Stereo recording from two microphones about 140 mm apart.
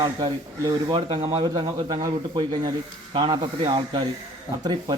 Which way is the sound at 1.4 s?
30° right (ahead or behind).